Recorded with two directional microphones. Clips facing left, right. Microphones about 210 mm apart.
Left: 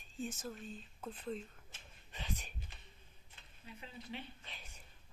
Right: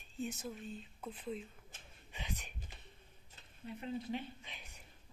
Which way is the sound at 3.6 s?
50° right (ahead or behind).